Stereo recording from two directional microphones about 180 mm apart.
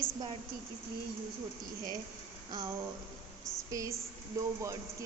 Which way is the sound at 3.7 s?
20° right (ahead or behind).